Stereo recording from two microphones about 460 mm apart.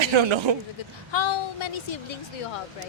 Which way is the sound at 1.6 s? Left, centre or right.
Left.